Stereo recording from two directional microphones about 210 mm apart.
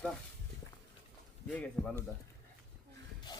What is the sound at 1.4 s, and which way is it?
Speech, 5° left (ahead or behind).